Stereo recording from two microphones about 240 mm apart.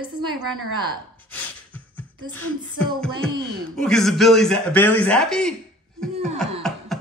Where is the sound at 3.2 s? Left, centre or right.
Centre.